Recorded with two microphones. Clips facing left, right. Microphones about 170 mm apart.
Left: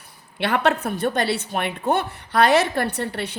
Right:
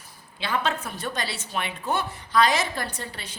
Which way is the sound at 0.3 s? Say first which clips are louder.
Left 7 dB; 70° left (ahead or behind).